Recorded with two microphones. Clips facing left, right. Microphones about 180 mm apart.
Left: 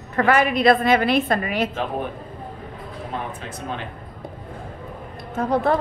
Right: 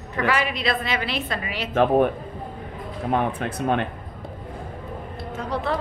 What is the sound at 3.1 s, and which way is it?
Speech, 60° right (ahead or behind).